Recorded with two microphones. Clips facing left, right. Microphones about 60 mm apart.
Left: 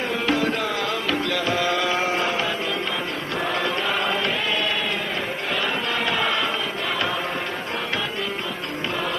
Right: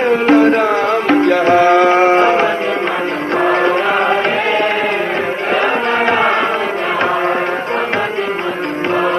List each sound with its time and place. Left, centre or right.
0.1 s music: right
3.4 s chant: right
6.1 s music: right